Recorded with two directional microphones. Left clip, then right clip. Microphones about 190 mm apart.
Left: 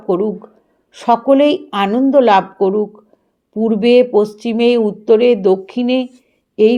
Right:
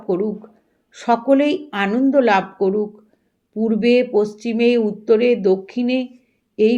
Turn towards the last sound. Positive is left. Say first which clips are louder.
# left 5 dB
turn(degrees=30)  # may be behind; listen again after turning